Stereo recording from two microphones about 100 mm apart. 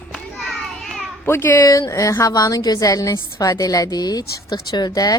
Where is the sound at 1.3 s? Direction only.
25° left (ahead or behind).